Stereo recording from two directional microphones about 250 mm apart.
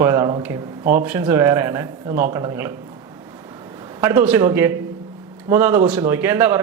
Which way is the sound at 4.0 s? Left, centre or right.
Centre.